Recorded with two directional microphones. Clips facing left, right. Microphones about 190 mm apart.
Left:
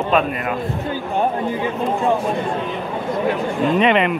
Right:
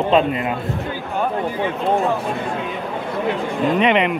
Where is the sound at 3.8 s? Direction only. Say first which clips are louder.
Left 1 dB; 10° right (ahead or behind).